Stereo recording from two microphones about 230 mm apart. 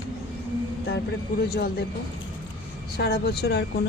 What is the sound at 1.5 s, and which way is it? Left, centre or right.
Speech, left.